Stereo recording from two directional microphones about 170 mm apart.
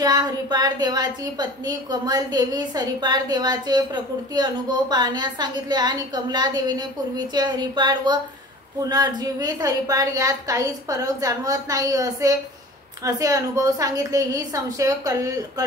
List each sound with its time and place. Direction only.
0.0 s a woman's voice: 25° right (ahead or behind)